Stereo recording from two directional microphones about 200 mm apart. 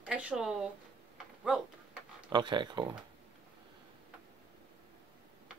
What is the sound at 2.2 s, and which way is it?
Speech, 20° right (ahead or behind).